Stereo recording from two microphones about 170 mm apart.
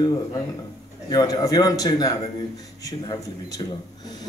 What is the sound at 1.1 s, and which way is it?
A man's voice, 20° left (ahead or behind).